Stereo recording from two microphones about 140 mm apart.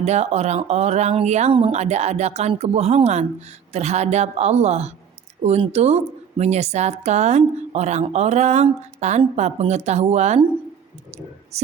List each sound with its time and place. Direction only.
0.0 s a woman's voice: 50° right (ahead or behind)
11.5 s a woman's voice: 50° right (ahead or behind)